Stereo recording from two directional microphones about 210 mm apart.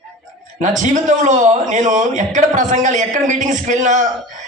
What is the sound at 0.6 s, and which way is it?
A man's voice, 35° right (ahead or behind).